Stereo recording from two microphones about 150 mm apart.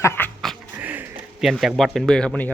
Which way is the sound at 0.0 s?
15° left (ahead or behind).